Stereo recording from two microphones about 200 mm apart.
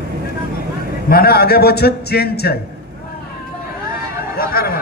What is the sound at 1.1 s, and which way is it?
A man's voice, 50° left (ahead or behind).